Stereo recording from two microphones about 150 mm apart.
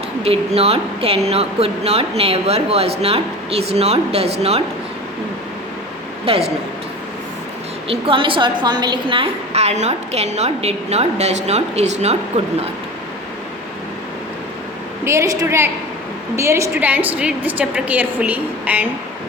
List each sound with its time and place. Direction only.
0.3 s a woman's voice: 40° right (ahead or behind)
6.2 s speech: 40° right (ahead or behind)
7.9 s a woman's voice: 35° right (ahead or behind)
15.0 s a woman's voice: 20° right (ahead or behind)